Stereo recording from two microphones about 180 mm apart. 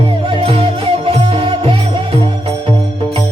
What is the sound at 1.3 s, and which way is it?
Music, 30° right (ahead or behind).